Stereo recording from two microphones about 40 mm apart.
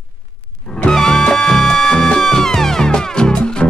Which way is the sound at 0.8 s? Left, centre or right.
Centre.